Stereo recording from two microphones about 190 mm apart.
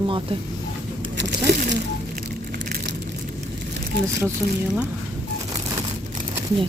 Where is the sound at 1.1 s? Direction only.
65° right (ahead or behind).